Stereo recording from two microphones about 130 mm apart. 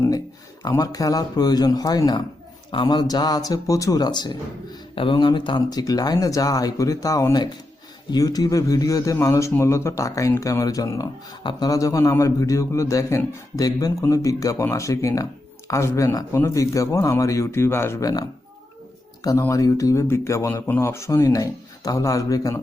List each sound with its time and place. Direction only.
0.8 s a man's voice: 30° left (ahead or behind)